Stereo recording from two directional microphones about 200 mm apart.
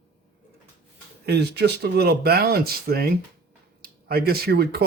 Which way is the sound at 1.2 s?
55° right (ahead or behind).